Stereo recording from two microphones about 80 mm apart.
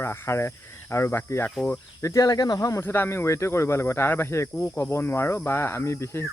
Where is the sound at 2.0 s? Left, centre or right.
Left.